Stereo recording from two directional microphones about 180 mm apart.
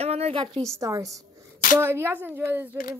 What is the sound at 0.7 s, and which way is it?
Speech, 15° right (ahead or behind).